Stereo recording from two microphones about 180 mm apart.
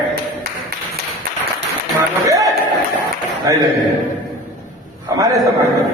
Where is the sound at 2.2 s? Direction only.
20° right (ahead or behind).